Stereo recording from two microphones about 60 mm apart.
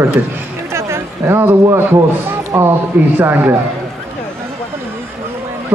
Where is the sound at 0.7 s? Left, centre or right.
Right.